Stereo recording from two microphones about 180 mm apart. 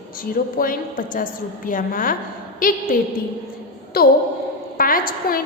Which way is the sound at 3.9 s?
55° left (ahead or behind).